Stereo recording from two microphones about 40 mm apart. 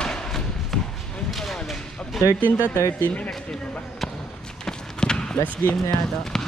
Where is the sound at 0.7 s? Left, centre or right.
Centre.